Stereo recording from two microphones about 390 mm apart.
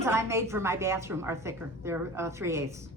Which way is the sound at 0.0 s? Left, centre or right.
Centre.